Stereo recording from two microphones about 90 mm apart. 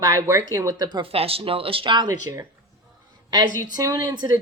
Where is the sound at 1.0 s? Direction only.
90° right.